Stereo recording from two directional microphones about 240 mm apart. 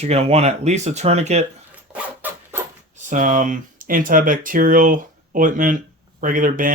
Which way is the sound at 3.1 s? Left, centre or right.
Right.